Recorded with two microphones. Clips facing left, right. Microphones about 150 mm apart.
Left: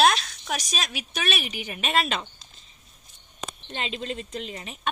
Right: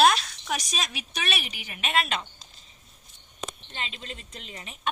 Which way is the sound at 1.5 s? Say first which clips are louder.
Left 2 dB; 25° left (ahead or behind).